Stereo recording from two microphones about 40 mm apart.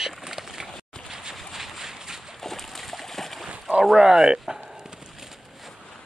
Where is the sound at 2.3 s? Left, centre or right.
Centre.